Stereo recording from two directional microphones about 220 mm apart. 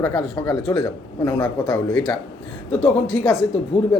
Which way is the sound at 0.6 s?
20° left (ahead or behind).